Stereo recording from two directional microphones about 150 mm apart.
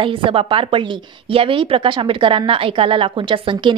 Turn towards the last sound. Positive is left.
turn(degrees=-35)  # may be behind; listen again after turning